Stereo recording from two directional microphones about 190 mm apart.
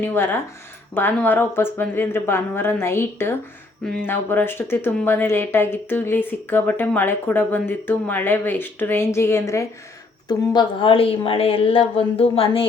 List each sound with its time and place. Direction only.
0.0 s a woman's voice: 10° left (ahead or behind); by 12.6 s 30° left (ahead or behind)